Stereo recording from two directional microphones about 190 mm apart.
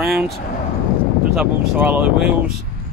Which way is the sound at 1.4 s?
5° right (ahead or behind).